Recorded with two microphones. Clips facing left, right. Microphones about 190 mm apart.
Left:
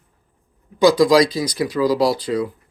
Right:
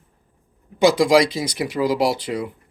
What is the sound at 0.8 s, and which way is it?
Speech, 25° right (ahead or behind).